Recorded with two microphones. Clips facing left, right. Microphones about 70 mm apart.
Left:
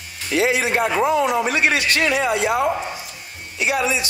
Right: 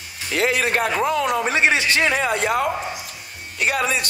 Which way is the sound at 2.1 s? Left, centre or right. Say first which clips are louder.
Left 1 dB; right.